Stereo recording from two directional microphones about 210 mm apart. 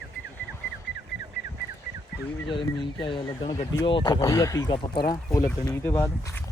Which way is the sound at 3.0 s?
25° left (ahead or behind).